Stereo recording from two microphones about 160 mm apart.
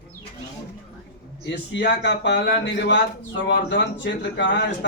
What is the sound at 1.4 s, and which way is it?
A man's voice, 90° left.